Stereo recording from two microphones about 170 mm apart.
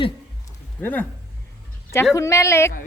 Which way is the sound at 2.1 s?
15° left (ahead or behind).